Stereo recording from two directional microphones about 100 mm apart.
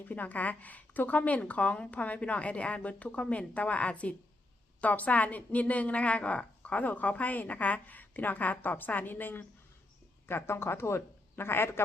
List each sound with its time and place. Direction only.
0.0 s a woman's voice: 15° left (ahead or behind)